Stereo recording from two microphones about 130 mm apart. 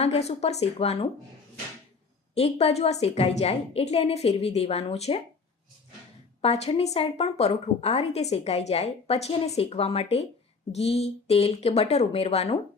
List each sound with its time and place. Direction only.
0.0 s a woman's voice: 55° left (ahead or behind)
2.3 s a woman's voice: 55° left (ahead or behind)
6.4 s a woman's voice: 50° left (ahead or behind)